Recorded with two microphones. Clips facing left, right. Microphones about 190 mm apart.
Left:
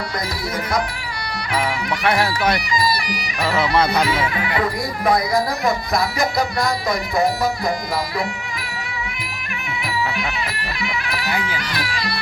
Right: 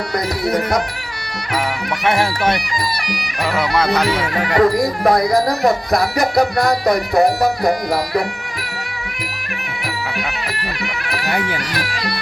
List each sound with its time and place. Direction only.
0.4 s music: 65° right (ahead or behind)
2.0 s speech: 25° right (ahead or behind)
2.9 s music: 65° right (ahead or behind)
3.8 s speech: 70° right (ahead or behind)
4.4 s speech: 40° right (ahead or behind)
5.6 s music: 65° right (ahead or behind)
10.8 s speech: 65° right (ahead or behind)